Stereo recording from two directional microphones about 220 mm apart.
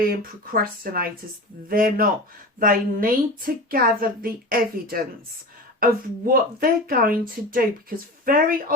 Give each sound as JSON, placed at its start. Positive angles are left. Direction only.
{"t": 0.0, "sound": "speech", "side_deg": -40}